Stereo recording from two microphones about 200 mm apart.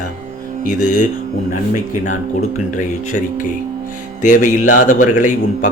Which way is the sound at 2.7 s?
40° left (ahead or behind).